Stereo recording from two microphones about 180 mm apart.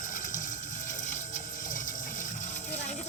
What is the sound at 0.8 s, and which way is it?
Pump, 45° left (ahead or behind).